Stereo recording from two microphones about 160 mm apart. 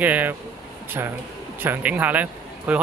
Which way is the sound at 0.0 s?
10° right (ahead or behind).